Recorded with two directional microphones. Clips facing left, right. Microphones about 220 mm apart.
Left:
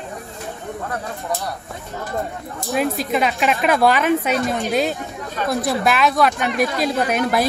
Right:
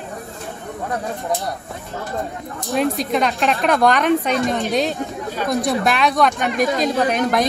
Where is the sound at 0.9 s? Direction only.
15° right (ahead or behind).